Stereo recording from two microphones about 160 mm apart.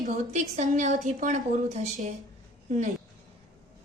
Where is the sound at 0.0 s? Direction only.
45° right (ahead or behind).